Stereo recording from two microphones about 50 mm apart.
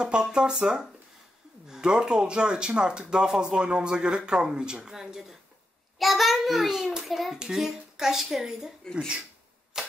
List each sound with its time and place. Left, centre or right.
0.0 s speech: centre
5.9 s child singing: centre
7.3 s speech: centre
8.9 s speech: centre
9.7 s clock: centre